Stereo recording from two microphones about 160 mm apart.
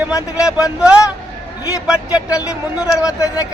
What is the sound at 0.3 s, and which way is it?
Speech, 5° right (ahead or behind).